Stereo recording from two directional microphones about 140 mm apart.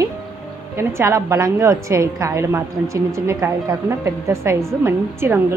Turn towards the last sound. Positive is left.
turn(degrees=-20)  # may be behind; listen again after turning